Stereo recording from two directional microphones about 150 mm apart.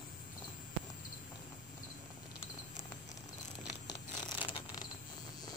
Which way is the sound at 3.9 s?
30° left (ahead or behind).